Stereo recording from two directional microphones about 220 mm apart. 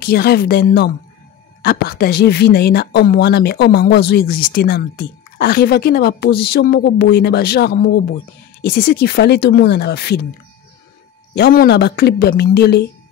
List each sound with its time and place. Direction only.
0.0 s speech: 45° left (ahead or behind)
11.3 s speech: 45° left (ahead or behind)